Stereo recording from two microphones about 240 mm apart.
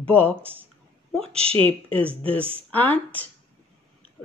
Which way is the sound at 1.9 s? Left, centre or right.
Right.